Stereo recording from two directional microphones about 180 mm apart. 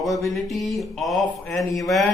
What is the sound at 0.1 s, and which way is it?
Speech, 20° left (ahead or behind).